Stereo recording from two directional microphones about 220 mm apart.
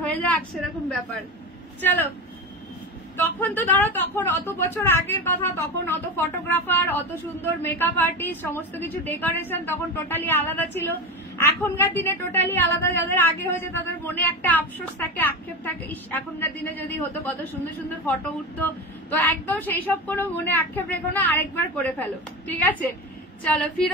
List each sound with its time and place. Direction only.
0.0 s a woman's voice: 5° left (ahead or behind)
3.2 s a woman's voice: 10° left (ahead or behind)
18.6 s a woman's voice: 10° left (ahead or behind)